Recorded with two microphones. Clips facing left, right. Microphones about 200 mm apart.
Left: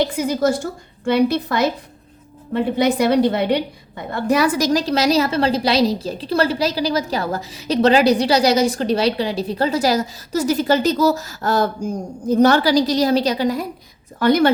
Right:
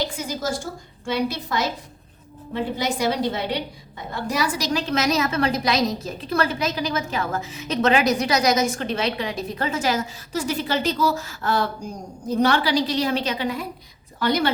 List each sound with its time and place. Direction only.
0.0 s a woman's voice: 60° left (ahead or behind); by 13.7 s 40° left (ahead or behind)
14.2 s a woman's voice: 50° left (ahead or behind)